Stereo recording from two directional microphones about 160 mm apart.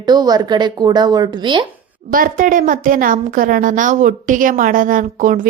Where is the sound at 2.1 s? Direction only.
60° right (ahead or behind).